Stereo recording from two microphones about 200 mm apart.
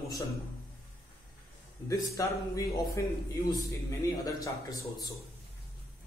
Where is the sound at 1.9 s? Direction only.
15° left (ahead or behind).